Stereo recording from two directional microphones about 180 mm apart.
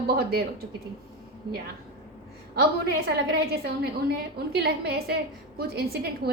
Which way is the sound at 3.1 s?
60° right (ahead or behind).